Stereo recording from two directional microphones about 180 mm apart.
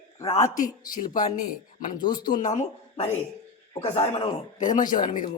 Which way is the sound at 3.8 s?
35° left (ahead or behind).